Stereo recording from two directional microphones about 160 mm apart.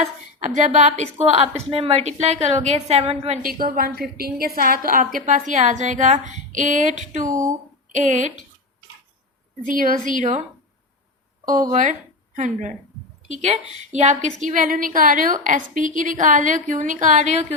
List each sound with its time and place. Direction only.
0.0 s a woman's voice: 45° right (ahead or behind)
3.6 s a woman's voice: 65° right (ahead or behind); by 8.3 s 50° right (ahead or behind)
9.6 s a woman's voice: 60° right (ahead or behind)
11.7 s a woman's voice: 50° right (ahead or behind)
14.4 s a woman's voice: 60° right (ahead or behind)